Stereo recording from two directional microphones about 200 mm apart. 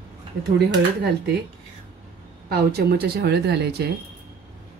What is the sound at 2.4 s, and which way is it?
Speech, 55° right (ahead or behind).